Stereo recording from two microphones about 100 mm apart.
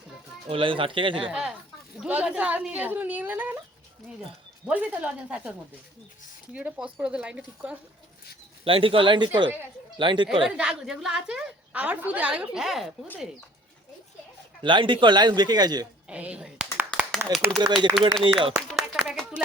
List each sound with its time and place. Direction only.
0.4 s speech: 65° right (ahead or behind)
1.3 s a woman's voice: 5° right (ahead or behind)
4.6 s a woman's voice: 15° right (ahead or behind)
8.6 s a man's voice: 65° right (ahead or behind)
10.4 s a woman's voice: 5° right (ahead or behind)
14.6 s a man's voice: 55° right (ahead or behind)
16.0 s speech: 10° right (ahead or behind)
16.9 s a sound: 10° left (ahead or behind)
17.6 s a man's voice: 45° right (ahead or behind)
18.2 s speech: 65° right (ahead or behind)
18.7 s clapping: centre (ahead or behind)